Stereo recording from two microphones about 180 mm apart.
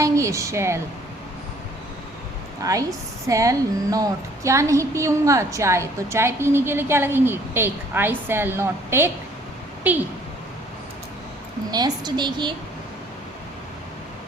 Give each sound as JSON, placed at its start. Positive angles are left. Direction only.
{"t": 0.0, "sound": "speech", "side_deg": -15}
{"t": 3.2, "sound": "a woman's voice", "side_deg": -20}
{"t": 11.7, "sound": "a woman's voice", "side_deg": -25}